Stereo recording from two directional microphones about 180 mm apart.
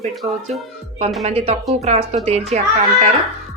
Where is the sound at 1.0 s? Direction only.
35° right (ahead or behind).